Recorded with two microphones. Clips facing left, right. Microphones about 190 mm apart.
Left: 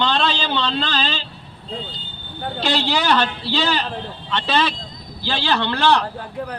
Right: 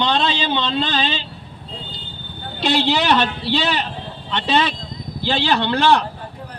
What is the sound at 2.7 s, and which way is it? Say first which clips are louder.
A man's voice: right 3 dB; 20° right (ahead or behind).